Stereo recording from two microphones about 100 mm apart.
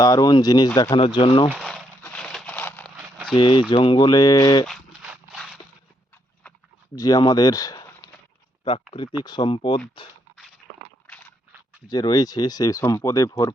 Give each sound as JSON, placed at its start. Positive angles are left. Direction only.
{"t": 0.0, "sound": "speech", "side_deg": 40}
{"t": 0.8, "sound": "speech", "side_deg": 55}
{"t": 1.5, "sound": "a sound", "side_deg": 5}
{"t": 3.3, "sound": "speech", "side_deg": 55}
{"t": 3.9, "sound": "speech", "side_deg": 45}
{"t": 4.6, "sound": "a sound", "side_deg": 0}
{"t": 6.9, "sound": "speech", "side_deg": 40}
{"t": 9.2, "sound": "speech", "side_deg": 50}
{"t": 11.9, "sound": "speech", "side_deg": 40}